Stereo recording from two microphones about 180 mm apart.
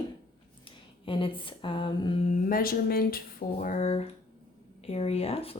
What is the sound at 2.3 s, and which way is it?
Speech, 50° left (ahead or behind).